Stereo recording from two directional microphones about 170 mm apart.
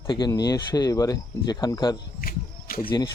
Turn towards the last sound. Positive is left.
turn(degrees=25)  # may be behind; listen again after turning